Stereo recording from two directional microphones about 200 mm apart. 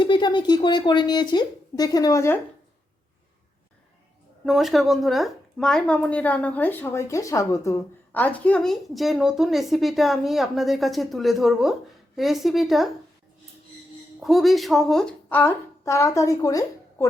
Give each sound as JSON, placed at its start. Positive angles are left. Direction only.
{"t": 0.0, "sound": "speech", "side_deg": 25}
{"t": 4.4, "sound": "a woman's voice", "side_deg": 0}
{"t": 14.2, "sound": "a woman's voice", "side_deg": 0}